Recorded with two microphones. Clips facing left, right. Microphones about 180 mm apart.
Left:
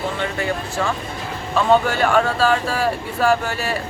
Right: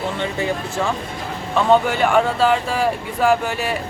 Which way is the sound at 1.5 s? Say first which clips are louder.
Right 1 dB; 20° right (ahead or behind).